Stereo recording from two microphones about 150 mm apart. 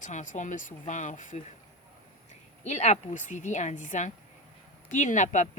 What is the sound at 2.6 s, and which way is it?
Speech, 50° left (ahead or behind).